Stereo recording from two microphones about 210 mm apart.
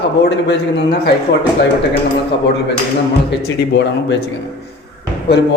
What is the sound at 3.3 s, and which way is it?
Speech, 55° left (ahead or behind).